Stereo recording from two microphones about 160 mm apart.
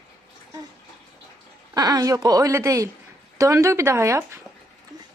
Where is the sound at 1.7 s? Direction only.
25° right (ahead or behind).